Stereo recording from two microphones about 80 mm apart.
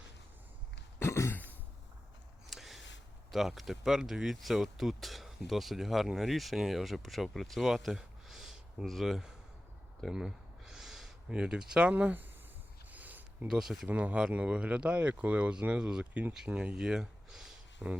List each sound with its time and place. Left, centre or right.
0.9 s throat clearing: left
2.5 s a sound: centre
3.3 s speech: centre
10.0 s a sound: centre; by 13.5 s right
13.5 s speech: centre
13.8 s speech: centre
17.8 s speech: centre